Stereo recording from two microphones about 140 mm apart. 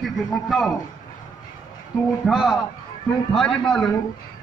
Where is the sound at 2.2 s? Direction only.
Centre (ahead or behind).